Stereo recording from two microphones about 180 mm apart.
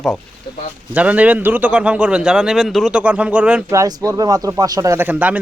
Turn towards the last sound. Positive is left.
turn(degrees=-10)  # may be behind; listen again after turning